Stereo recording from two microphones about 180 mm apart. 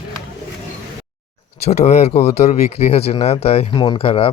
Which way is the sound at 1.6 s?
35° left (ahead or behind).